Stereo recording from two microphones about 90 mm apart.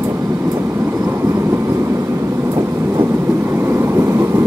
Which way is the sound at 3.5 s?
25° right (ahead or behind).